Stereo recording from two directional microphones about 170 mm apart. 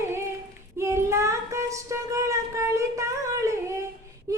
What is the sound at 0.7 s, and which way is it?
Child singing, 15° right (ahead or behind).